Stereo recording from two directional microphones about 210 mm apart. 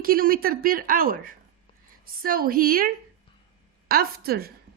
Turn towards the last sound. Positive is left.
turn(degrees=-45)  # may be behind; listen again after turning